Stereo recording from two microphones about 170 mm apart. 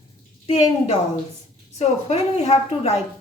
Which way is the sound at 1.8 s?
40° left (ahead or behind).